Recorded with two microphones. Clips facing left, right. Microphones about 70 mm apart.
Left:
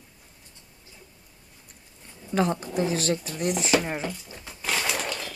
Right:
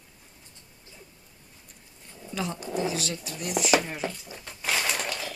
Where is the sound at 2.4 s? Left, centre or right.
Left.